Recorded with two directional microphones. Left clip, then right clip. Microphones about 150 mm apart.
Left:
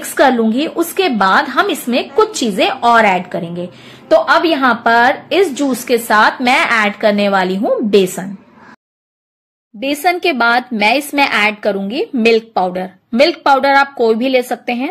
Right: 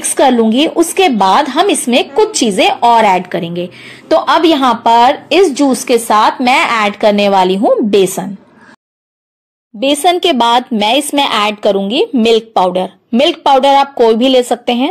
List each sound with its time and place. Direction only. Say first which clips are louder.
0.1 s a woman's voice: right 2 dB; 25° right (ahead or behind)
9.8 s a woman's voice: right 4 dB; 35° right (ahead or behind)
11.9 s a woman's voice: right 3 dB; 5° left (ahead or behind)
12.4 s a woman's voice: right 5 dB; 30° right (ahead or behind)